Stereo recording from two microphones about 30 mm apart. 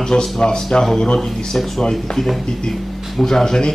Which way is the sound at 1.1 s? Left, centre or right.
Centre.